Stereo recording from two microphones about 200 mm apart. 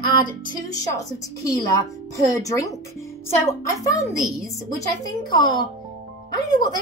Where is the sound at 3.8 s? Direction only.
15° left (ahead or behind).